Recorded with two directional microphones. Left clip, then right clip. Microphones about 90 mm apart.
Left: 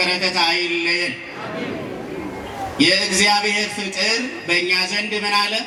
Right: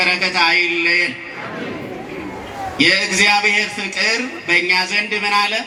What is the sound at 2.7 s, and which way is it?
A man's voice, 30° right (ahead or behind).